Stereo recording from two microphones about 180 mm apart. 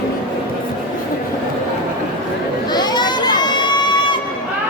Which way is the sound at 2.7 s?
25° left (ahead or behind).